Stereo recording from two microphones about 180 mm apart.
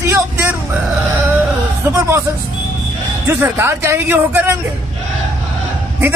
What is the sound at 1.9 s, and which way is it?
Speech, 15° right (ahead or behind).